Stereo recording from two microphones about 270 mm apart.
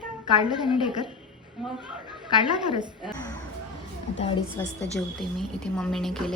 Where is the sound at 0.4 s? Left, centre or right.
Centre.